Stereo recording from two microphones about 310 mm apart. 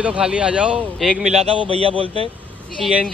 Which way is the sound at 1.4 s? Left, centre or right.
Centre.